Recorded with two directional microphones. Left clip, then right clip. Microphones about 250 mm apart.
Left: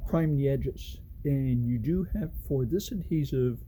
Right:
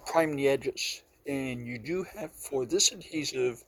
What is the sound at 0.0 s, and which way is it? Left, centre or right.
Speech, centre.